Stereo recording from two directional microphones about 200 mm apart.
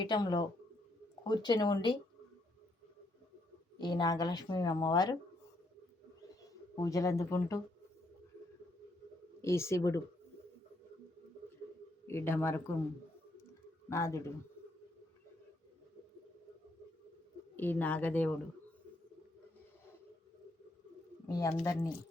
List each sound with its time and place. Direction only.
0.0 s a woman's voice: 20° left (ahead or behind)
3.8 s a woman's voice: 20° left (ahead or behind)
6.7 s speech: 15° left (ahead or behind)
9.4 s speech: 15° left (ahead or behind)
12.0 s speech: 10° left (ahead or behind)
13.9 s speech: 15° left (ahead or behind)
17.6 s speech: 10° left (ahead or behind)
21.2 s speech: 15° left (ahead or behind)